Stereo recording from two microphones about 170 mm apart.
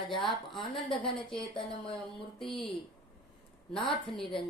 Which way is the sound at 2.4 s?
Centre (ahead or behind).